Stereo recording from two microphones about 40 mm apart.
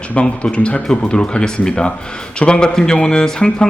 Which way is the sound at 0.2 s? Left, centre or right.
Left.